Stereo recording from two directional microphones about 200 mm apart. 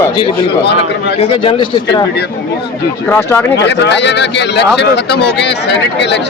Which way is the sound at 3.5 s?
60° left (ahead or behind).